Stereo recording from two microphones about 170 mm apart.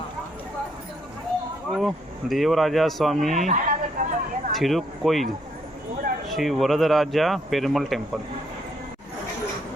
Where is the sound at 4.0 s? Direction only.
50° right (ahead or behind).